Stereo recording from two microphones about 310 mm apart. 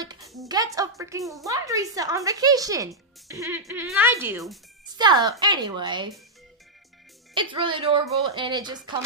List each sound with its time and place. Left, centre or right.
0.2 s a sound: centre
0.5 s a woman's voice: centre
7.3 s a woman's voice: centre